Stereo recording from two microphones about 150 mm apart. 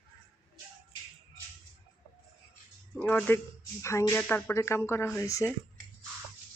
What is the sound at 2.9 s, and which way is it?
Speech, 10° left (ahead or behind).